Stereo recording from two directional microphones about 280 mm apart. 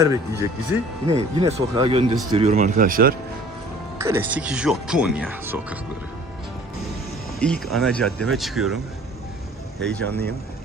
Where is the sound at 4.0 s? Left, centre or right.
Centre.